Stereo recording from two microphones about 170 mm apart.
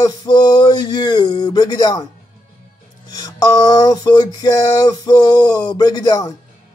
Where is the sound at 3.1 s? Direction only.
20° left (ahead or behind).